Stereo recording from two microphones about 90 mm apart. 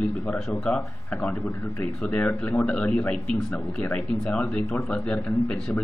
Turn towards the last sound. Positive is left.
turn(degrees=5)  # may be behind; listen again after turning